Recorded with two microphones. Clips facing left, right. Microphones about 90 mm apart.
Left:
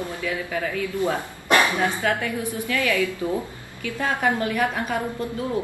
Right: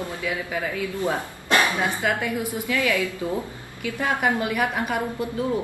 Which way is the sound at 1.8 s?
15° right (ahead or behind).